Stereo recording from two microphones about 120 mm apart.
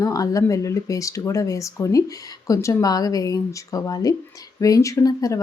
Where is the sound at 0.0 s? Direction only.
30° left (ahead or behind).